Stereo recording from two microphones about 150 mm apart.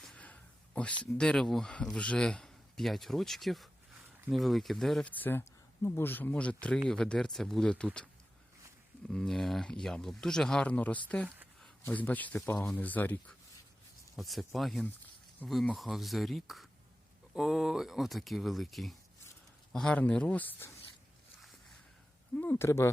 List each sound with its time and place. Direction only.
0.0 s a sound: 5° left (ahead or behind)
1.2 s a man's voice: 5° left (ahead or behind)
9.0 s a man's voice: 5° left (ahead or behind)
14.2 s a man's voice: centre (ahead or behind)
22.4 s speech: 15° left (ahead or behind)